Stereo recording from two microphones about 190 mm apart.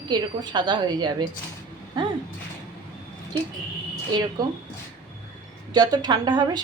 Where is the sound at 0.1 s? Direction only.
25° right (ahead or behind).